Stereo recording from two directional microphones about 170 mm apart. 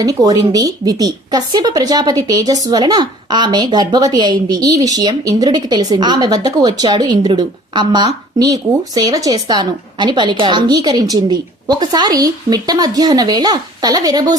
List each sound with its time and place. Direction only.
0.0 s a woman's voice: 20° right (ahead or behind)